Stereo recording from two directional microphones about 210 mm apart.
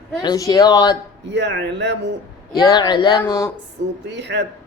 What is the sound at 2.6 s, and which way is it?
Speech, 20° left (ahead or behind).